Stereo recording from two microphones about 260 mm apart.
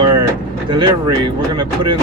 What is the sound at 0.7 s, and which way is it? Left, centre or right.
Speech, centre.